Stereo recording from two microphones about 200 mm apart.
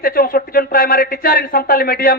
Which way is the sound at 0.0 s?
45° left (ahead or behind).